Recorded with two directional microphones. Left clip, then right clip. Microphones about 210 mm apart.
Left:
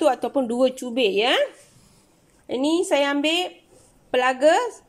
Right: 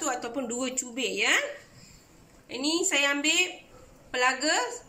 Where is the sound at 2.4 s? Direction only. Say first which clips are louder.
Left 6 dB; 35° left (ahead or behind).